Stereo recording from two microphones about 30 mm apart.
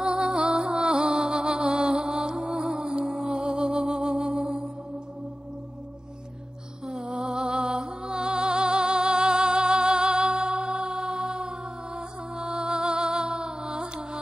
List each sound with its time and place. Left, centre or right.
0.0 s music: right
6.9 s music: right